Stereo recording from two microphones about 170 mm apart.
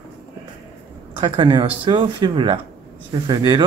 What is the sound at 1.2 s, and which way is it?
Speech, 30° right (ahead or behind).